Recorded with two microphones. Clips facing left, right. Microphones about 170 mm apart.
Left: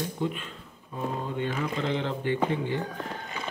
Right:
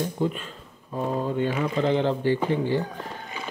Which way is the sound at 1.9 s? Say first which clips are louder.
Right 6 dB; 35° right (ahead or behind).